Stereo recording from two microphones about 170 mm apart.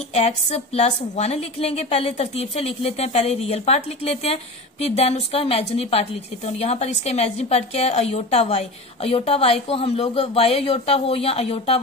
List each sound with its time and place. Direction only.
0.1 s a woman's voice: 40° left (ahead or behind)